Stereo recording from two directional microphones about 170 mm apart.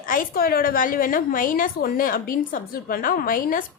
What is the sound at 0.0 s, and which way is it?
A woman's voice, 55° left (ahead or behind).